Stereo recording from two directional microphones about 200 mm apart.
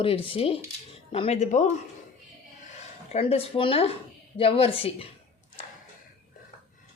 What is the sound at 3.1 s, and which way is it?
A woman's voice, 30° left (ahead or behind).